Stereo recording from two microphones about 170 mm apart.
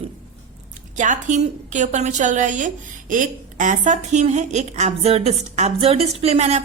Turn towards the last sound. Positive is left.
turn(degrees=-40)  # may be behind; listen again after turning